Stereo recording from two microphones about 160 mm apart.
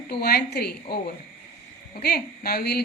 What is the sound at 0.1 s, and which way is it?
Speech, 75° left (ahead or behind).